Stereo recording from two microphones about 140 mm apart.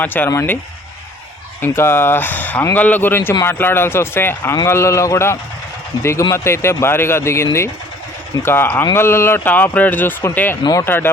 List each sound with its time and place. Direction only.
0.0 s speech: 15° left (ahead or behind)
1.6 s speech: 15° left (ahead or behind)
10.6 s speech: 25° left (ahead or behind)
10.8 s speech: 15° left (ahead or behind)